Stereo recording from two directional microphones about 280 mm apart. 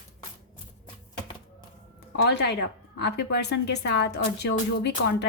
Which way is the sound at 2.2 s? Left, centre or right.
Left.